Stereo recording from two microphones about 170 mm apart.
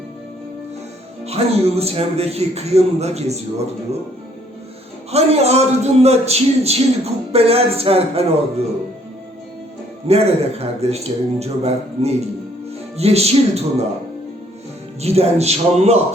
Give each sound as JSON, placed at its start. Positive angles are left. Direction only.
{"t": 1.2, "sound": "a man's voice", "side_deg": -35}
{"t": 5.1, "sound": "a man's voice", "side_deg": -40}
{"t": 10.1, "sound": "a man's voice", "side_deg": -35}
{"t": 15.0, "sound": "a man's voice", "side_deg": -40}